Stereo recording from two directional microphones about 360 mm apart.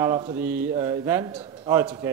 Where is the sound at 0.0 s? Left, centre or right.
Centre.